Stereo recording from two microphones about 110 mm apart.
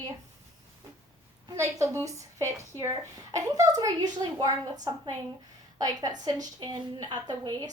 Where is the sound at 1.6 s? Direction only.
30° right (ahead or behind).